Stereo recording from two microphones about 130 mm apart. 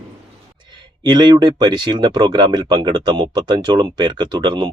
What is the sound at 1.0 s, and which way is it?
Speech, 35° right (ahead or behind).